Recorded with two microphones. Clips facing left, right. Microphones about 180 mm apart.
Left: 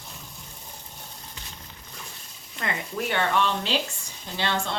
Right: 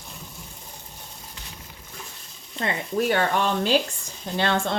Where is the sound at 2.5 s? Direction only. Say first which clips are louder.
Right 5 dB; 35° right (ahead or behind).